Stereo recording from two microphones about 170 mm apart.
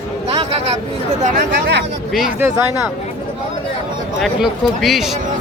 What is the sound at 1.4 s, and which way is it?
Speech, 80° right.